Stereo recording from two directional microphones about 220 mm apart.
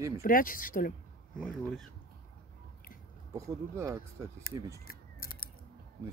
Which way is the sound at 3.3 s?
15° right (ahead or behind).